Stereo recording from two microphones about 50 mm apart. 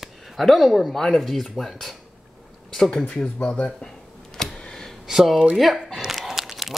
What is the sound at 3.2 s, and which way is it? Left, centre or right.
Speech, left.